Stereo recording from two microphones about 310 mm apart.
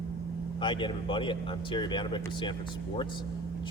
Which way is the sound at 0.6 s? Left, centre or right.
Centre.